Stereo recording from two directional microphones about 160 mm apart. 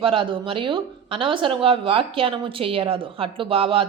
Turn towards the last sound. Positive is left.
turn(degrees=-35)  # may be behind; listen again after turning